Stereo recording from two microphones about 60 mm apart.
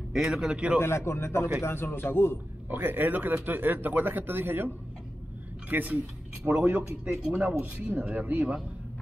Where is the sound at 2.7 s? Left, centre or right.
Right; by 7.3 s centre.